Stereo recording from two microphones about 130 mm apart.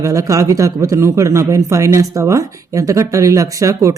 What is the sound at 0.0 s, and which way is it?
Speech, 25° right (ahead or behind).